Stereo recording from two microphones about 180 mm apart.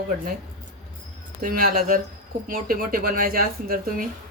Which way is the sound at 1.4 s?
55° right (ahead or behind).